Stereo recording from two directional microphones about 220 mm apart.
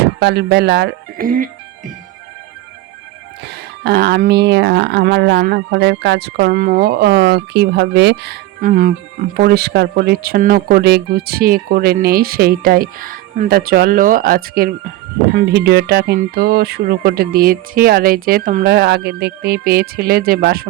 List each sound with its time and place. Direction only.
0.0 s speech: 50° right (ahead or behind)
3.4 s speech: 45° right (ahead or behind)
8.6 s speech: 35° right (ahead or behind)